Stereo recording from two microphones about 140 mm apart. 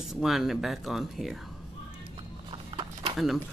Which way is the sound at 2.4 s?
35° right (ahead or behind).